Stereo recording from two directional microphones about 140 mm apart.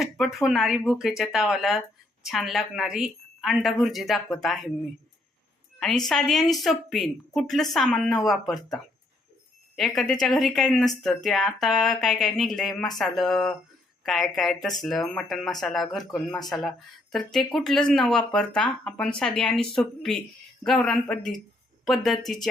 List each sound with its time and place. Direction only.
0.0 s speech: centre (ahead or behind)
6.1 s speech: centre (ahead or behind)